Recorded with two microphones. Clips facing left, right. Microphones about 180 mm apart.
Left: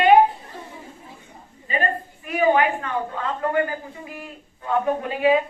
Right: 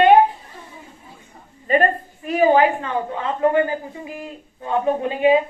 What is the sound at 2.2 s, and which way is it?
A woman's voice, 35° right (ahead or behind).